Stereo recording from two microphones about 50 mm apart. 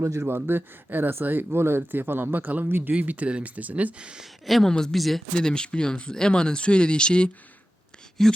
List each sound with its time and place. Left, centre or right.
0.0 s speech: right
0.3 s speech: right
2.9 s speech: right
3.9 s speech: centre
4.2 s speech: centre
4.7 s speech: centre
4.9 s speech: centre
5.3 s speech: centre
8.2 s speech: centre